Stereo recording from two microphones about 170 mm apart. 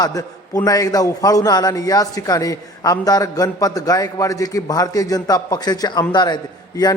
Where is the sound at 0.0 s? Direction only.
20° left (ahead or behind).